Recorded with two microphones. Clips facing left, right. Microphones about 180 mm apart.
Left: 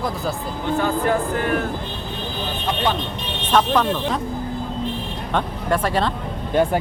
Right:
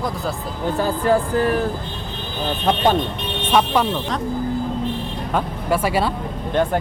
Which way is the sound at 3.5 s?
10° right (ahead or behind).